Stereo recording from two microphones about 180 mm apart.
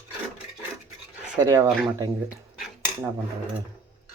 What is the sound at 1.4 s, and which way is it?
Speech, 20° right (ahead or behind).